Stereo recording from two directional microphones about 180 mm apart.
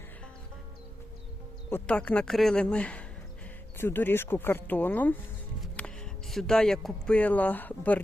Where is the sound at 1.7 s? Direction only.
10° left (ahead or behind).